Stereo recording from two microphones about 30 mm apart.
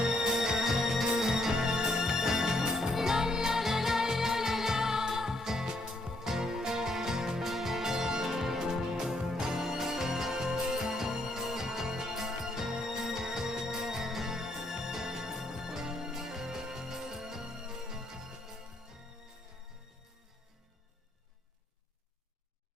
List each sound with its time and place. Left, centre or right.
0.0 s music: right; by 3.0 s centre
3.0 s music: centre